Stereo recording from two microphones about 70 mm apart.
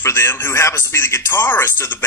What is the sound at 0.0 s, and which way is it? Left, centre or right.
A man's voice, left.